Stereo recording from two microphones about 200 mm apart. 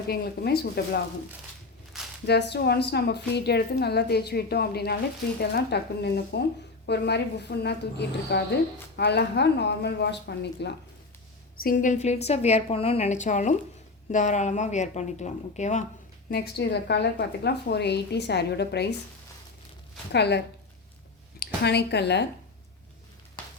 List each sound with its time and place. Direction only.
0.1 s a woman's voice: 55° left (ahead or behind)
2.2 s a woman's voice: 55° left (ahead or behind)
11.6 s a woman's voice: 40° left (ahead or behind)
16.3 s a woman's voice: 50° left (ahead or behind)
20.1 s a woman's voice: 55° left (ahead or behind)